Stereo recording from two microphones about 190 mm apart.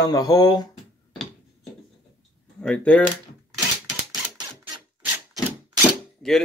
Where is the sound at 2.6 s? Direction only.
5° left (ahead or behind).